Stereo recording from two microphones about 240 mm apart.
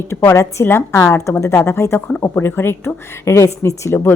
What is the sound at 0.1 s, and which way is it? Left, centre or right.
A woman's voice, centre.